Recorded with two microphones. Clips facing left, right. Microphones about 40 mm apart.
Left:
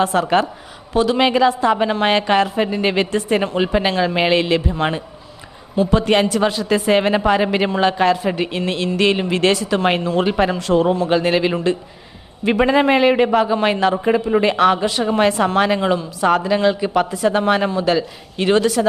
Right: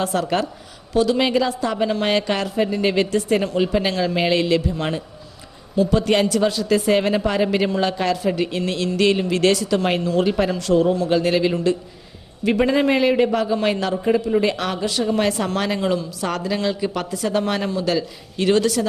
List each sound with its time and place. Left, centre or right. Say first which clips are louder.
0.0 s a man's voice: left 5 dB; left